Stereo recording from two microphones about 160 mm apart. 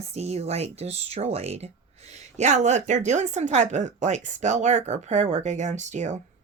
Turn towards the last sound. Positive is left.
turn(degrees=-45)  # may be behind; listen again after turning